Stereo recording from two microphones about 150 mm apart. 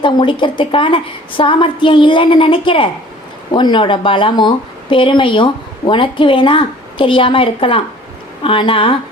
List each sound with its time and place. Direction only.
0.0 s speech: 35° left (ahead or behind)